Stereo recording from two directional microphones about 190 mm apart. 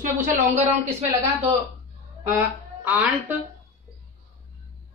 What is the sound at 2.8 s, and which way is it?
Speech, 10° right (ahead or behind).